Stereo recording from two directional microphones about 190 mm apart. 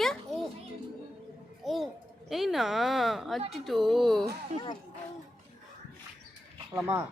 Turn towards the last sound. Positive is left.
turn(degrees=-10)  # may be behind; listen again after turning